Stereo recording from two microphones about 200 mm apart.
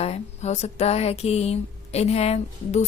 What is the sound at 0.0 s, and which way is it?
Speech, 35° left (ahead or behind).